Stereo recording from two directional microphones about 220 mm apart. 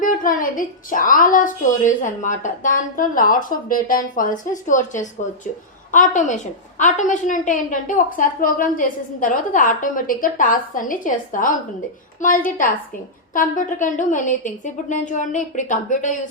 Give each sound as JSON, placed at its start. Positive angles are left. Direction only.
{"t": 0.0, "sound": "a woman's voice", "side_deg": 35}